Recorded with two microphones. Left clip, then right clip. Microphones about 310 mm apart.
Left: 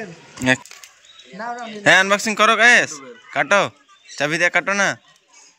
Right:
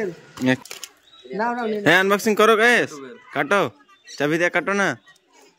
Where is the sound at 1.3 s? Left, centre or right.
Right.